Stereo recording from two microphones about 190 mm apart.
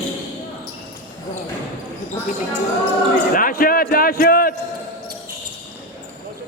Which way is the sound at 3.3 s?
45° left (ahead or behind).